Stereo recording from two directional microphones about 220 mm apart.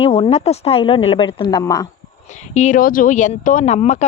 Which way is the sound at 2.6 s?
35° left (ahead or behind).